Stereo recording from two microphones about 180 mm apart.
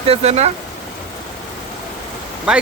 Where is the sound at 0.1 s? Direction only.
35° right (ahead or behind).